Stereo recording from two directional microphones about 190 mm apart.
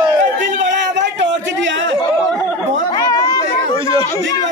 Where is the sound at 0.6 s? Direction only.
70° right (ahead or behind).